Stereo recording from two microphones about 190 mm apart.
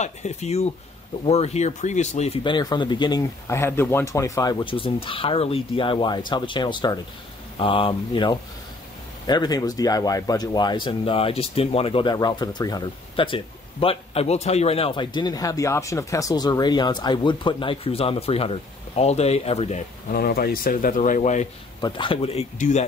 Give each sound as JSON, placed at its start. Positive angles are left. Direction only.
{"t": 0.0, "sound": "speech", "side_deg": 35}
{"t": 20.1, "sound": "speech", "side_deg": 50}
{"t": 21.8, "sound": "speech", "side_deg": 25}